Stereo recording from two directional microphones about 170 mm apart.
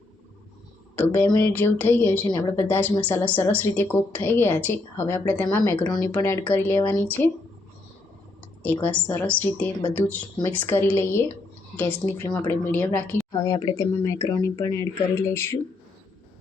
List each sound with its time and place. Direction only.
0.9 s a woman's voice: 10° left (ahead or behind)
1.3 s speech: 25° left (ahead or behind)
1.5 s a woman's voice: 10° left (ahead or behind)
8.6 s a woman's voice: 10° left (ahead or behind)